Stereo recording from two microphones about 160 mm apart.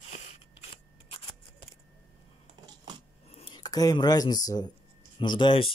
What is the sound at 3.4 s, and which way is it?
Speech, 30° left (ahead or behind).